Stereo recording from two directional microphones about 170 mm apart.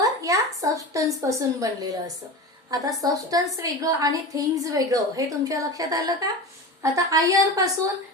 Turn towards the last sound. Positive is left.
turn(degrees=-20)  # may be behind; listen again after turning